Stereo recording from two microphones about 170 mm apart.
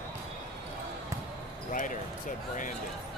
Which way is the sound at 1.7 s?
50° left (ahead or behind).